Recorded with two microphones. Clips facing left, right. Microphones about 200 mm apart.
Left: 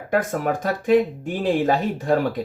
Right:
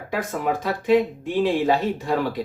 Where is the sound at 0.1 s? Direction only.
50° left (ahead or behind).